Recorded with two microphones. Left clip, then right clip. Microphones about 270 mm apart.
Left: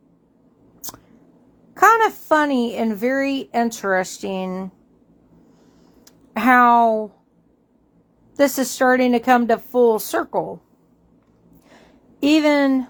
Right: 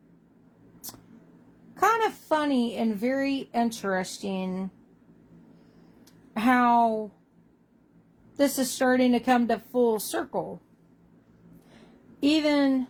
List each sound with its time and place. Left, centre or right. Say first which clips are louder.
1.7 s a woman's voice: left 9 dB; left
6.1 s a woman's voice: left 8 dB; left
8.4 s a woman's voice: left 7 dB; left
12.2 s a woman's voice: left 7 dB; left